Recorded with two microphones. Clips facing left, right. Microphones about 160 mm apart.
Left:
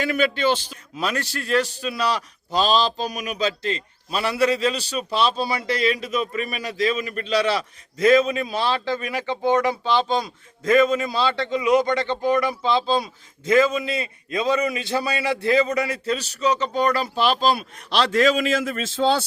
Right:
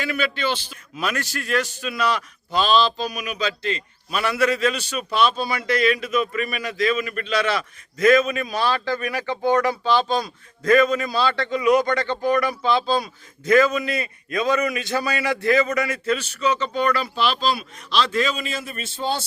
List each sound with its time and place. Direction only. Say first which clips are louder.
0.0 s a man's voice: left 4 dB; 45° left (ahead or behind); by 19.0 s 90° left